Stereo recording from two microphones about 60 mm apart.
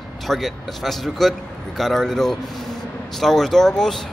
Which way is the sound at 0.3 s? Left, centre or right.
Centre.